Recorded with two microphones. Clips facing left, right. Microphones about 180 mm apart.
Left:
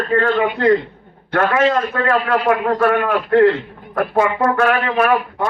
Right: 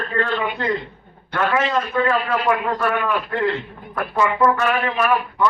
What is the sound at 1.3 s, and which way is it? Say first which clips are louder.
Speech: left 5 dB; 55° left (ahead or behind).